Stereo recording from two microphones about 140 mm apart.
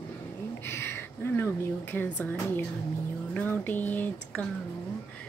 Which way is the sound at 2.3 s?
25° left (ahead or behind).